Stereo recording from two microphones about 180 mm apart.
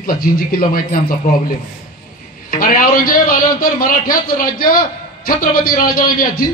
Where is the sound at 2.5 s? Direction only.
50° left (ahead or behind).